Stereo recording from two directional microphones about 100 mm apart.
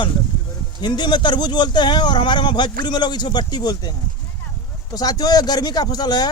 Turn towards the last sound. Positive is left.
turn(degrees=45)  # may be behind; listen again after turning